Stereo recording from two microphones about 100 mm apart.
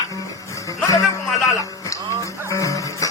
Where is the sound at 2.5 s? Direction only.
30° left (ahead or behind).